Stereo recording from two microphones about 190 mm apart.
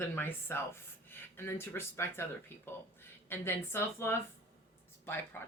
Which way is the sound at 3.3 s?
10° left (ahead or behind).